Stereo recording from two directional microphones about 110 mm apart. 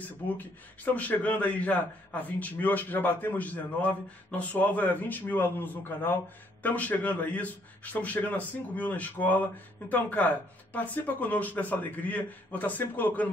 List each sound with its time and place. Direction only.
0.9 s a man's voice: 15° left (ahead or behind)